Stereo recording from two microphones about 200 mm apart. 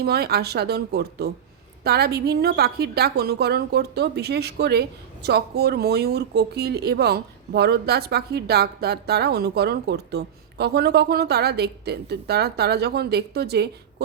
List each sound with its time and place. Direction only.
0.0 s a woman's voice: 50° right (ahead or behind)